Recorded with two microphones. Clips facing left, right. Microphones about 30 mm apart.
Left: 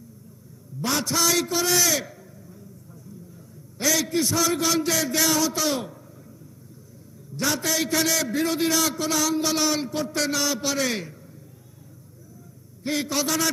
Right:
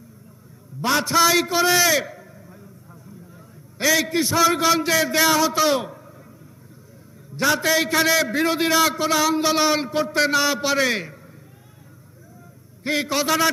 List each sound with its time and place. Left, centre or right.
0.8 s a man's voice: right
3.8 s a man's voice: right
7.3 s a man's voice: right
12.8 s a man's voice: right